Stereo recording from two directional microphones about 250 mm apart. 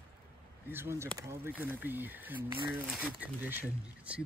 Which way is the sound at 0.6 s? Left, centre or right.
Centre.